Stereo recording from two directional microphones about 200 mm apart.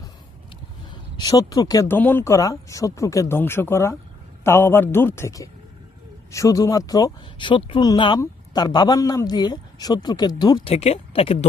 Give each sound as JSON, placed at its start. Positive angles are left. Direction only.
{"t": 0.9, "sound": "speech", "side_deg": 20}